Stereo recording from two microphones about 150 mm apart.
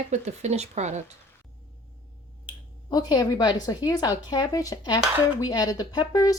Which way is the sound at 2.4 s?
25° left (ahead or behind).